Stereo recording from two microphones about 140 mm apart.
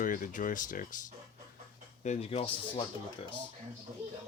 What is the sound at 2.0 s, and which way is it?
Speech, 45° left (ahead or behind).